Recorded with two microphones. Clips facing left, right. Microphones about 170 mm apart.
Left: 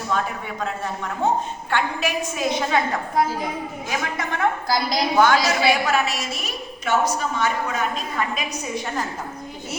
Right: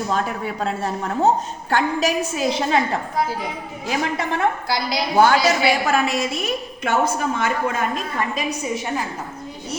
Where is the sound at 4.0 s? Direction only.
30° right (ahead or behind).